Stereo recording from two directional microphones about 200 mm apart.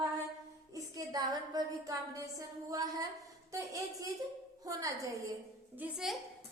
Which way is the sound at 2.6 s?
15° right (ahead or behind).